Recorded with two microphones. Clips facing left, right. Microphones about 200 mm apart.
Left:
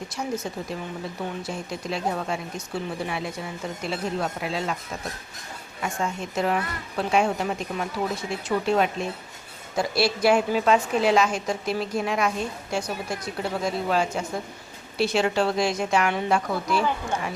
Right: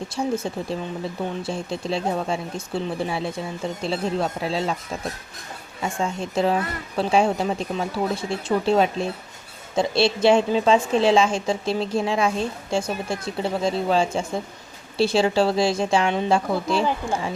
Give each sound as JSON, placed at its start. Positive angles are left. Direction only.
{"t": 0.1, "sound": "a woman's voice", "side_deg": -30}
{"t": 5.8, "sound": "a woman's voice", "side_deg": -30}